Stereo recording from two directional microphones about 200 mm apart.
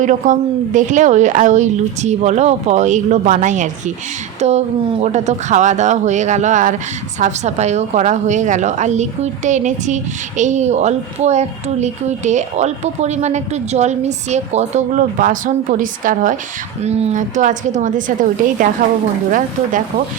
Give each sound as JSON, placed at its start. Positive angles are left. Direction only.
{"t": 0.0, "sound": "a woman's voice", "side_deg": -40}